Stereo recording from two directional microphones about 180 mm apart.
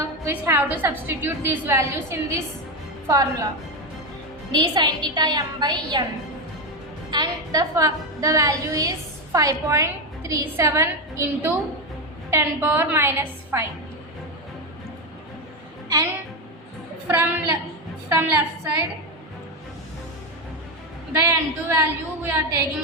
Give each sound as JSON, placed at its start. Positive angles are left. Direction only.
{"t": 0.0, "sound": "a woman's voice", "side_deg": -15}
{"t": 4.5, "sound": "a woman's voice", "side_deg": -25}
{"t": 7.1, "sound": "a woman's voice", "side_deg": -20}
{"t": 17.1, "sound": "a woman's voice", "side_deg": -10}
{"t": 21.1, "sound": "a woman's voice", "side_deg": -15}